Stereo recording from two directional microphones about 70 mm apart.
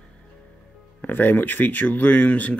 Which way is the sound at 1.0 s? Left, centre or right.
Left.